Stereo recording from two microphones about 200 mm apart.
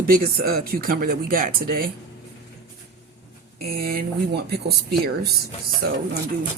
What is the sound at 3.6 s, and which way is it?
Speech, 50° right (ahead or behind).